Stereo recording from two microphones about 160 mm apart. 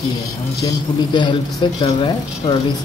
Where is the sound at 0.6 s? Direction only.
25° left (ahead or behind).